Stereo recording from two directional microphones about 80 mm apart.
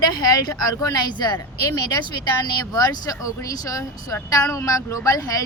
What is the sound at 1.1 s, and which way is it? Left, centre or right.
Speech, left.